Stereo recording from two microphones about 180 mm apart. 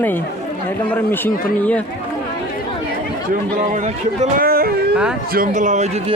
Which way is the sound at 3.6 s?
45° right (ahead or behind).